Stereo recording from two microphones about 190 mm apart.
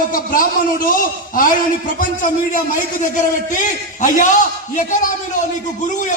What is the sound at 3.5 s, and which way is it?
A man's voice, 40° left (ahead or behind).